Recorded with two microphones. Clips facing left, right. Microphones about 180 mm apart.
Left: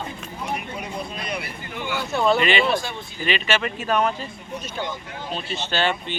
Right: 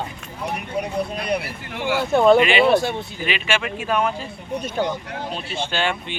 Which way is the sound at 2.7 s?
55° right (ahead or behind).